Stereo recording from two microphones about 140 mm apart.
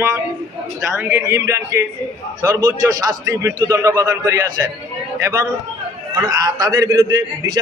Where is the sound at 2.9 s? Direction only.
25° right (ahead or behind).